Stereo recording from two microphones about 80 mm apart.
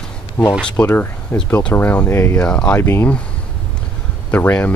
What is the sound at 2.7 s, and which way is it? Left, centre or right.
Speech, left.